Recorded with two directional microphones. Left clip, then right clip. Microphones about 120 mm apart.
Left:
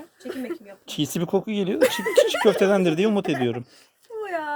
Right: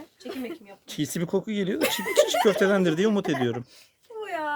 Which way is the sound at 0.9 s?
15° left (ahead or behind).